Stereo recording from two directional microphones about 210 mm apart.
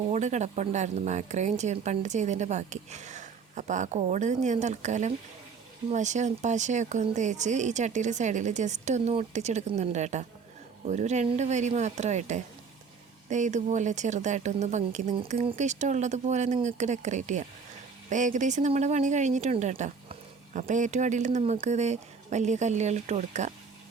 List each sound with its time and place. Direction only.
0.1 s speech: 35° right (ahead or behind)